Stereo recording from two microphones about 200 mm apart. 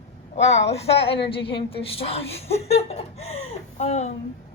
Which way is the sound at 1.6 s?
25° left (ahead or behind).